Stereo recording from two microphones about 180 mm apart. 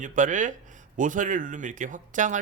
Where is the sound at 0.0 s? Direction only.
45° right (ahead or behind).